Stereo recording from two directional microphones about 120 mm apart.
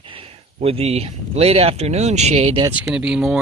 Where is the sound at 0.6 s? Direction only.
55° right (ahead or behind).